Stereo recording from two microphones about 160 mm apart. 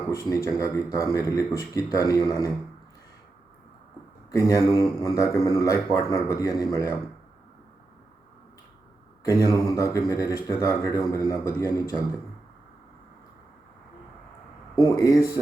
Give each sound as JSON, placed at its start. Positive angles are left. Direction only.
{"t": 0.1, "sound": "speech", "side_deg": 20}
{"t": 4.3, "sound": "speech", "side_deg": 20}
{"t": 9.2, "sound": "speech", "side_deg": 20}
{"t": 14.8, "sound": "speech", "side_deg": 25}